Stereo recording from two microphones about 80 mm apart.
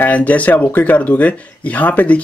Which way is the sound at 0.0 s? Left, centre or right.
Centre.